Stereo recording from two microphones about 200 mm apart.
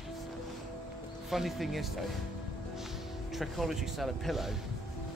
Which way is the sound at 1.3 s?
Centre (ahead or behind).